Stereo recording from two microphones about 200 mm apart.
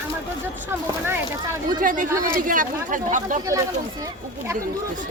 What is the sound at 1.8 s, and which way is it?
Speech, 40° right (ahead or behind).